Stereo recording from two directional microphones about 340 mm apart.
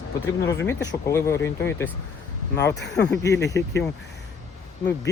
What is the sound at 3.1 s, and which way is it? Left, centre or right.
Speech, centre.